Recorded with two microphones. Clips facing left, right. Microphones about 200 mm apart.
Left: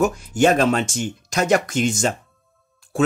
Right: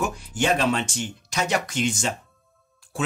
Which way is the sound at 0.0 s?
45° left (ahead or behind).